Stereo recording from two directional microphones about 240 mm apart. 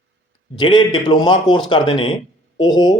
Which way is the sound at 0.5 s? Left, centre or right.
Centre.